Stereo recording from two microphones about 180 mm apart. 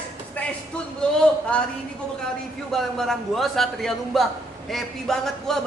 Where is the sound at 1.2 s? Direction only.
5° left (ahead or behind).